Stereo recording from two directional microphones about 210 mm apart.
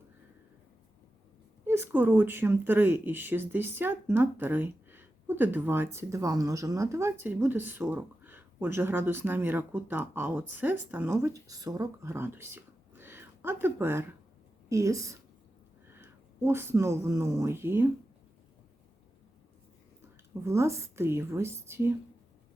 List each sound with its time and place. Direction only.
1.6 s speech: 10° right (ahead or behind)
20.4 s speech: 15° right (ahead or behind)